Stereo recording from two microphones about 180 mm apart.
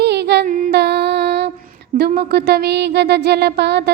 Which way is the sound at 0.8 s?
70° right (ahead or behind).